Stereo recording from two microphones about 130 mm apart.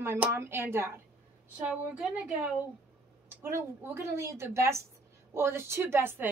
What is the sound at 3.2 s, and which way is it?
A woman's voice, 20° right (ahead or behind).